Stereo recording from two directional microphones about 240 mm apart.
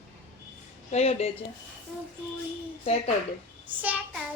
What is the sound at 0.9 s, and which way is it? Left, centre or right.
Speech, left.